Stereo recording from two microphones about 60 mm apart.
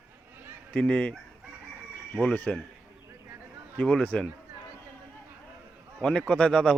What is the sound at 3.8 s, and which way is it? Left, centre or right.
Speech, centre.